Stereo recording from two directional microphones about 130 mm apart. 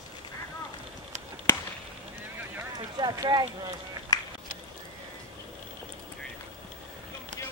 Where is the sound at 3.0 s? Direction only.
35° right (ahead or behind).